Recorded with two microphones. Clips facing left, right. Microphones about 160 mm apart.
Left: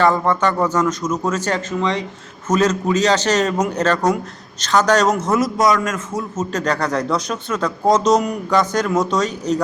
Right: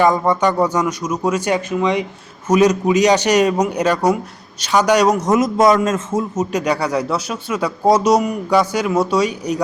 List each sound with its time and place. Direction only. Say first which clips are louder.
0.0 s a man's voice: right 2 dB; 15° right (ahead or behind)
6.3 s speech: left 1 dB; 15° right (ahead or behind)